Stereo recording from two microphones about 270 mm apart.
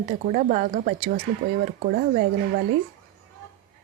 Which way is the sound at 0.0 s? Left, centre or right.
Right.